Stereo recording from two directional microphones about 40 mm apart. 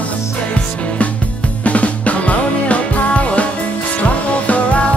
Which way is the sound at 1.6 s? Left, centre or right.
Left.